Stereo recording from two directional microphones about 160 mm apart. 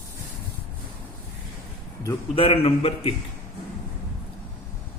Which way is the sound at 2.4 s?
40° left (ahead or behind).